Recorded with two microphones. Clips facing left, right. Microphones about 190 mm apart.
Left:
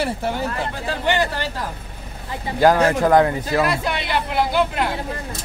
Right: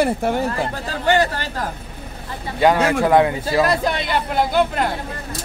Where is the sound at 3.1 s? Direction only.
15° right (ahead or behind).